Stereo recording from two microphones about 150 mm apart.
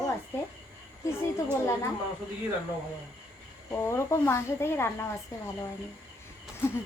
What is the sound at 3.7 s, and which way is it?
A woman's voice, 15° left (ahead or behind).